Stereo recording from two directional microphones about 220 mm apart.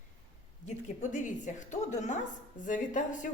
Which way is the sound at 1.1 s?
35° left (ahead or behind).